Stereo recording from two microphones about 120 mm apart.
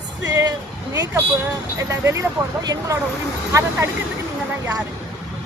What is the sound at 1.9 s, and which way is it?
A woman's voice, 25° right (ahead or behind).